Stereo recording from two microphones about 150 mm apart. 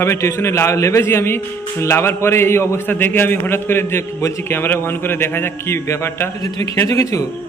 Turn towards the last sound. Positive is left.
turn(degrees=20)  # may be behind; listen again after turning